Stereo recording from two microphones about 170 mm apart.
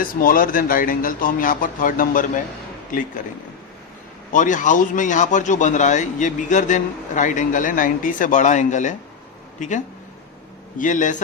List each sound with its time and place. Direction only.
0.0 s speech: 55° left (ahead or behind)
4.3 s a man's voice: 50° left (ahead or behind)